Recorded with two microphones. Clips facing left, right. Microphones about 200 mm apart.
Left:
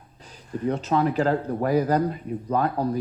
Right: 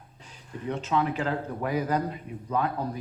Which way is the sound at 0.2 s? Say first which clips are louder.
Left 9 dB; 40° left (ahead or behind).